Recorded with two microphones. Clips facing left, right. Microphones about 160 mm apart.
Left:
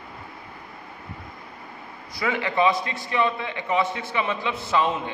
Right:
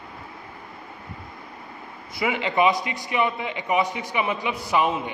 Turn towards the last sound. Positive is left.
turn(degrees=-15)  # may be behind; listen again after turning